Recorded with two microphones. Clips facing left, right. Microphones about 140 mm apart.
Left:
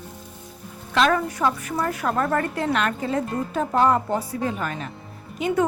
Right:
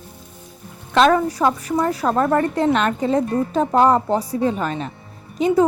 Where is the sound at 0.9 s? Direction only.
35° right (ahead or behind).